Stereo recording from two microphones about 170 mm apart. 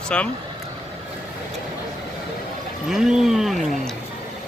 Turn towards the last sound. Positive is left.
turn(degrees=0)  # may be behind; listen again after turning